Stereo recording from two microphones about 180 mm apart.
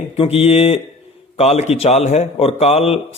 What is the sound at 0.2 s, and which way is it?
Speech, 30° left (ahead or behind).